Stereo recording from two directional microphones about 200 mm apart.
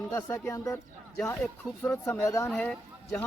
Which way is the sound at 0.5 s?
15° left (ahead or behind).